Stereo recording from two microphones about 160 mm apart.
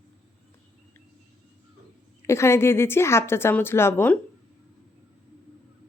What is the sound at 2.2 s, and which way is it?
A woman's voice, 15° left (ahead or behind).